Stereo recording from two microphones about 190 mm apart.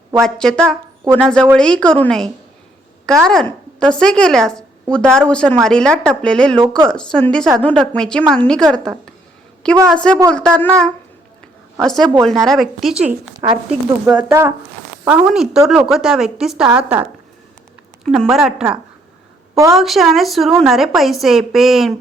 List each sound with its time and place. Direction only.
0.2 s a woman's voice: 5° left (ahead or behind)
6.6 s speech: 25° right (ahead or behind)
6.9 s a woman's voice: 5° left (ahead or behind)
9.9 s a woman's voice: 5° left (ahead or behind)
19.7 s a woman's voice: centre (ahead or behind)